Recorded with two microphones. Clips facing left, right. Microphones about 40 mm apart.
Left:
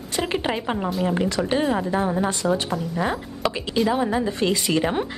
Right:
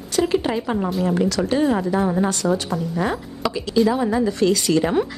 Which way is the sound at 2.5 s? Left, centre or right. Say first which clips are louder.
Right 1 dB; centre.